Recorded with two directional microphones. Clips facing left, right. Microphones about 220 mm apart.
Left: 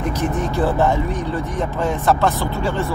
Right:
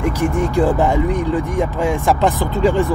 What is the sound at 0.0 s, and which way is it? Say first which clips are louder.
Speech: right 4 dB; 10° right (ahead or behind).